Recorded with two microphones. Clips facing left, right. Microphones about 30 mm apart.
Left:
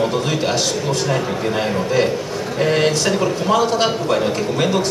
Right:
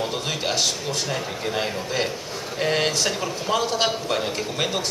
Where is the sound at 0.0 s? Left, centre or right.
Centre.